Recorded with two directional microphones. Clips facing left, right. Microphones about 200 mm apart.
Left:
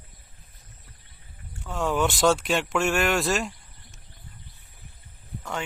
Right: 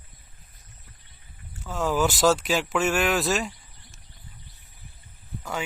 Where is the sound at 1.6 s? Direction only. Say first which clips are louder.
Right 1 dB; centre (ahead or behind).